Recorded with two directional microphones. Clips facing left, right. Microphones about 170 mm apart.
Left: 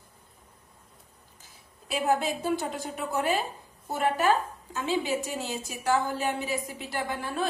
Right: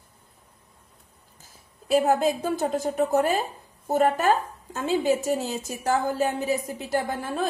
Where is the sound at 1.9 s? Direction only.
40° right (ahead or behind).